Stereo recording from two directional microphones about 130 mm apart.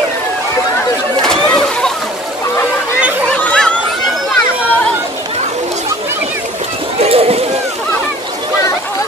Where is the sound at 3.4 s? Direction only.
10° left (ahead or behind).